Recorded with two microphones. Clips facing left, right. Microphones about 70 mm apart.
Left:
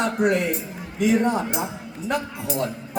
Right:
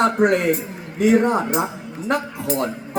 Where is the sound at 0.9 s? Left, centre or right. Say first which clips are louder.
Right 4 dB; right.